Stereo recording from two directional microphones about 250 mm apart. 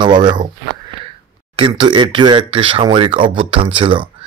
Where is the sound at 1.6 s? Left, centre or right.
Centre.